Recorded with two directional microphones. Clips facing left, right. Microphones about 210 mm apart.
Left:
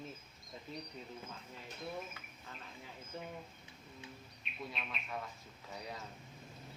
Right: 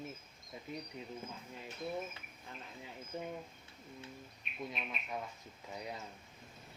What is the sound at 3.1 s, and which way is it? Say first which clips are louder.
Speech: right 4 dB; 20° right (ahead or behind).